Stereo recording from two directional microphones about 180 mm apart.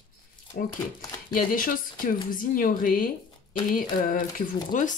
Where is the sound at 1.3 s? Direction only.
50° left (ahead or behind).